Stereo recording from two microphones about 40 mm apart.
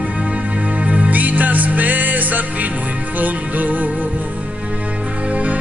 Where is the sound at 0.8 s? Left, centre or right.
Right.